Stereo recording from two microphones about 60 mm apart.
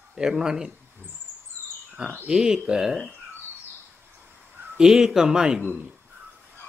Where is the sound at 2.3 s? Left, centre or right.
Centre.